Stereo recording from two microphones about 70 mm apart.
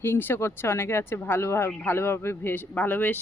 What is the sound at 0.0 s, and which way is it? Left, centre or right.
Speech, left.